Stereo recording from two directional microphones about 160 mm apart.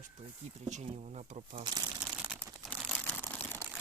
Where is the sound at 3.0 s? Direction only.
10° left (ahead or behind).